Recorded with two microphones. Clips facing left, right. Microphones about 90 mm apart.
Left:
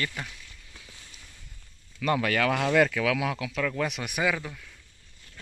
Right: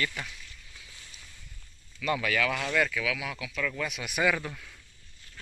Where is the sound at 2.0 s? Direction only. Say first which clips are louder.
Left 3 dB; 50° left (ahead or behind).